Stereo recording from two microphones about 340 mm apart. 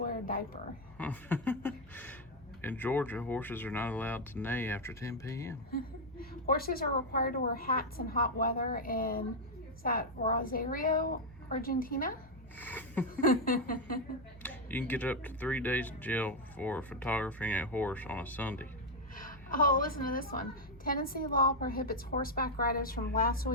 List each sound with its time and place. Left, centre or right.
0.0 s speech: left
0.9 s speech: centre
5.7 s a woman's voice: left
12.5 s speech: centre
13.2 s a woman's voice: left
14.4 s speech: centre
19.1 s a sound: left
20.1 s a woman's voice: left